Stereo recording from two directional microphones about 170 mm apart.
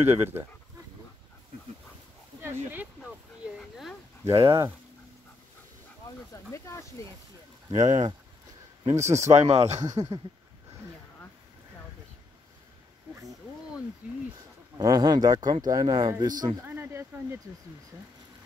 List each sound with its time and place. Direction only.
0.0 s speech: 15° right (ahead or behind)
2.4 s speech: 10° right (ahead or behind)
3.0 s a sound: centre (ahead or behind)
4.2 s speech: 25° right (ahead or behind)
6.3 s speech: 15° left (ahead or behind)
7.7 s speech: 45° right (ahead or behind)
8.9 s speech: 15° right (ahead or behind)
9.3 s speech: 40° right (ahead or behind)
9.8 s speech: 20° right (ahead or behind)
14.8 s speech: 25° right (ahead or behind)
16.6 s a sound: 10° right (ahead or behind)